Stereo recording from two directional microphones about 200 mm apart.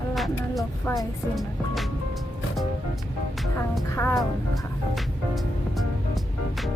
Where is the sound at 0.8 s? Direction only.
15° left (ahead or behind).